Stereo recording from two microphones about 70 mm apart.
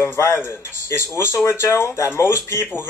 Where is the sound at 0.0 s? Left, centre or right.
Left.